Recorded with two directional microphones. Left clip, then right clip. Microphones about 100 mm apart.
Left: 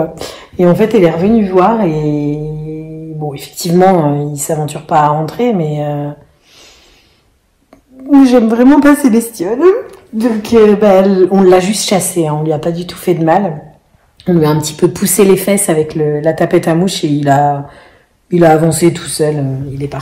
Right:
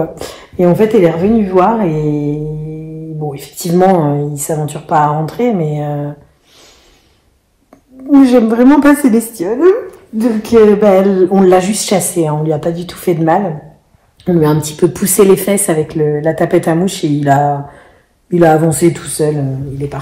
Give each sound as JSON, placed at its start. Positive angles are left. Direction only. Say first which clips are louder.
{"t": 0.0, "sound": "a woman's voice", "louder": "left 1 dB", "side_deg": 15}
{"t": 8.2, "sound": "a woman's voice", "louder": "even", "side_deg": 15}